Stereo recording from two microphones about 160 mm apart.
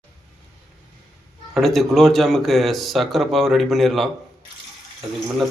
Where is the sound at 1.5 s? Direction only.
Centre (ahead or behind).